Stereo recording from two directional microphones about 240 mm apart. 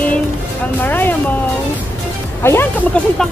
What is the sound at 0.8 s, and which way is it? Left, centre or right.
Speech, centre.